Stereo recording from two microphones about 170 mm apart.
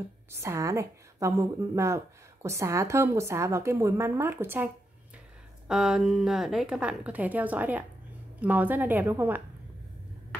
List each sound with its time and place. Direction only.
0.3 s a woman's voice: 15° right (ahead or behind)
5.7 s a woman's voice: 5° right (ahead or behind)